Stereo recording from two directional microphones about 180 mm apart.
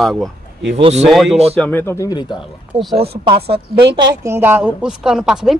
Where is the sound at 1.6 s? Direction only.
10° left (ahead or behind).